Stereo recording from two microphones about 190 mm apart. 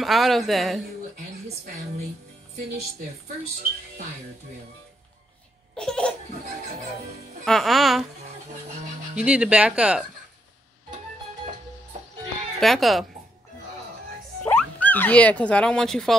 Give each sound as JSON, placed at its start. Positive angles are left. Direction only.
{"t": 0.0, "sound": "speech", "side_deg": 0}
{"t": 5.8, "sound": "speech", "side_deg": 5}
{"t": 7.4, "sound": "speech", "side_deg": 0}
{"t": 9.1, "sound": "speech", "side_deg": -5}
{"t": 12.5, "sound": "speech", "side_deg": 0}
{"t": 14.4, "sound": "speech", "side_deg": 10}